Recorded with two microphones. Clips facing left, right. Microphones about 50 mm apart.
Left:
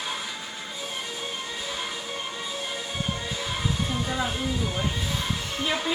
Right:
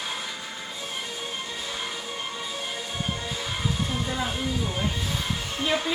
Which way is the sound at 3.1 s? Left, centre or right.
Centre.